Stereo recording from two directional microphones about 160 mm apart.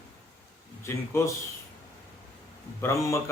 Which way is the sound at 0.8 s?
15° left (ahead or behind).